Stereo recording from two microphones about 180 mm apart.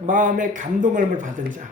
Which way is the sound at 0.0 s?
45° right (ahead or behind).